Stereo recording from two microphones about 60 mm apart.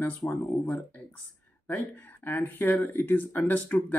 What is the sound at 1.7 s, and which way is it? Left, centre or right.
Speech, left.